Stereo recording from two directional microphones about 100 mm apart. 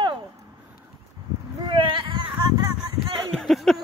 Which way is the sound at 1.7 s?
55° right (ahead or behind).